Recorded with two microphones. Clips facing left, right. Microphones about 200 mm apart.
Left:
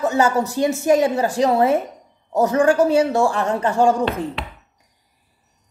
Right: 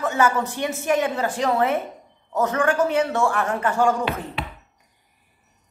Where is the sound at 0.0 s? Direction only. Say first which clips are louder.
Left 3 dB; 40° left (ahead or behind).